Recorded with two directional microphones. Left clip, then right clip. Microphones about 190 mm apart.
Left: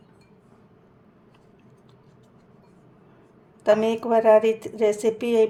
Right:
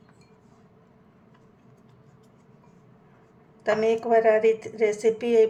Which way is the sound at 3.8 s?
5° right (ahead or behind).